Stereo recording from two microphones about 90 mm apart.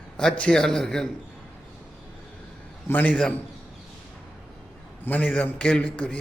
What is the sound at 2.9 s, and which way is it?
Speech, 20° left (ahead or behind).